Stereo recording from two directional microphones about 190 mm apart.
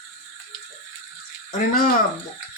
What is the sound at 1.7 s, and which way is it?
Speech, 50° left (ahead or behind).